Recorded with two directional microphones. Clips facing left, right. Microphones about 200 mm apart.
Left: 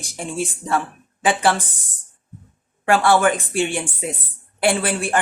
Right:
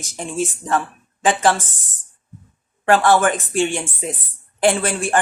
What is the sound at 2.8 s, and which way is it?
Speech, 10° left (ahead or behind).